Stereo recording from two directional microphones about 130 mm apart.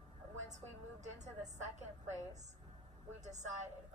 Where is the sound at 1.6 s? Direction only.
60° right (ahead or behind).